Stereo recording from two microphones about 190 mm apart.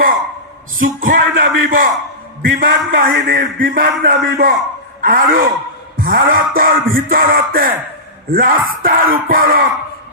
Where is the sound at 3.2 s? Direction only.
45° right (ahead or behind).